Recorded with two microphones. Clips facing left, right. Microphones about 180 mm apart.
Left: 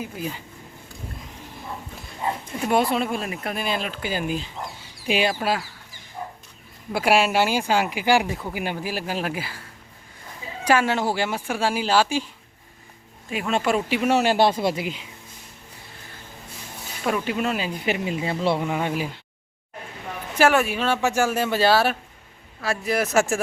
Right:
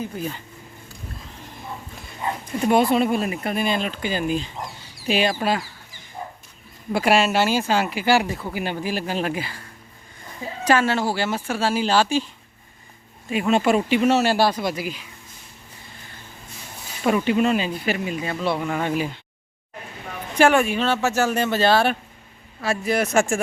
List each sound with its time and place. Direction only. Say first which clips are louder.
0.0 s speech: right 2 dB; 10° left (ahead or behind)
2.6 s speech: right 4 dB; centre (ahead or behind)
6.9 s speech: right 1 dB; 10° left (ahead or behind)
13.3 s speech: right 4 dB; 5° right (ahead or behind); by 15.0 s 25° left (ahead or behind)
17.0 s speech: right 5 dB; 5° right (ahead or behind)
17.8 s speech: even; 20° left (ahead or behind)
18.6 s speech: right 1 dB; 10° left (ahead or behind)
20.3 s speech: right 2 dB; 5° left (ahead or behind)